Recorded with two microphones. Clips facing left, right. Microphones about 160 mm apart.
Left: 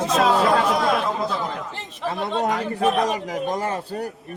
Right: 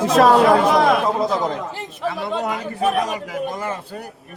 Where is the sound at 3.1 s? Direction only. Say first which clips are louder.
Left 1 dB; 40° left (ahead or behind).